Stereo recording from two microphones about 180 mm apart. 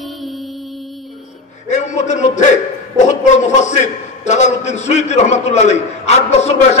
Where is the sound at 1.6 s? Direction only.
40° left (ahead or behind).